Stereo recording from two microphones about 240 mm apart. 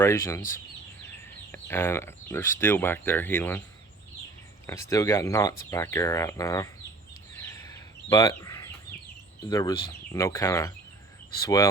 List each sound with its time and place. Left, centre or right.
0.0 s speech: centre
4.6 s speech: centre
8.1 s bird: centre
9.5 s speech: centre